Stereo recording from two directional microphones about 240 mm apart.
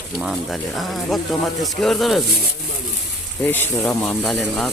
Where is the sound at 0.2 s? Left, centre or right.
Centre.